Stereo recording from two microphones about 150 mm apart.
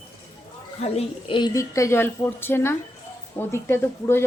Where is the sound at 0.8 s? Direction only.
40° left (ahead or behind).